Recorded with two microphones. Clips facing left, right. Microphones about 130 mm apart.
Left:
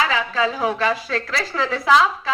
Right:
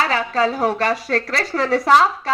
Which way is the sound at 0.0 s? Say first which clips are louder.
Right 2 dB; 40° right (ahead or behind).